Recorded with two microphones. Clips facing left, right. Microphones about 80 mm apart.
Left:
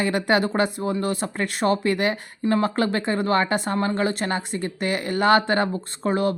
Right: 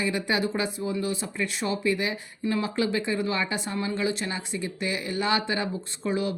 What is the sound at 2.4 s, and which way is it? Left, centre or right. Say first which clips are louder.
Speech: left 5 dB; left.